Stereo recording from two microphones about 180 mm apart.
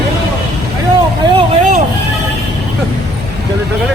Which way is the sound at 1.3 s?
40° right (ahead or behind).